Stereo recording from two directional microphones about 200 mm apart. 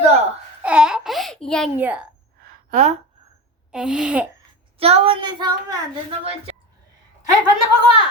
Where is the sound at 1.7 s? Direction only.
10° right (ahead or behind).